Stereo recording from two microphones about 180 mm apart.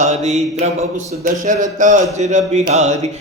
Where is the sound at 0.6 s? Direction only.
40° right (ahead or behind).